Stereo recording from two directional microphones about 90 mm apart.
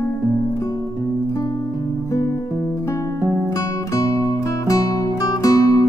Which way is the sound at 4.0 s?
40° left (ahead or behind).